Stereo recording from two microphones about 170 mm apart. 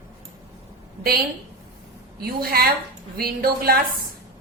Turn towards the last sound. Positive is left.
turn(degrees=-60)  # may be behind; listen again after turning